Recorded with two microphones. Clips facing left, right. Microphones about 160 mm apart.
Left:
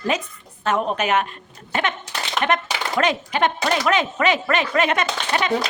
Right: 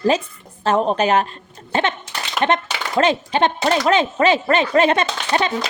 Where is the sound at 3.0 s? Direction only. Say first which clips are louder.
Right 4 dB; 30° right (ahead or behind).